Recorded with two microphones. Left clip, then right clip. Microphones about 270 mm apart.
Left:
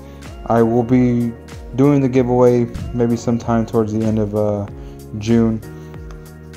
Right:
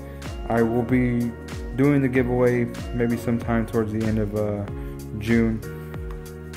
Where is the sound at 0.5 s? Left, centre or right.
Centre.